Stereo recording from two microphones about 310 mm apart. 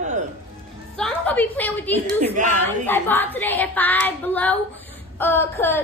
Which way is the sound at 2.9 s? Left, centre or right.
Centre.